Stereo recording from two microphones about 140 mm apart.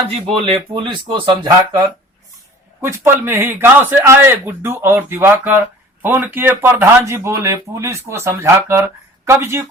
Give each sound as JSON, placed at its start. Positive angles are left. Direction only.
{"t": 0.3, "sound": "speech", "side_deg": -40}
{"t": 2.8, "sound": "speech", "side_deg": -20}